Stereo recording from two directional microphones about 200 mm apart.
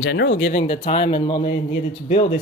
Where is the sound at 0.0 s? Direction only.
55° left (ahead or behind).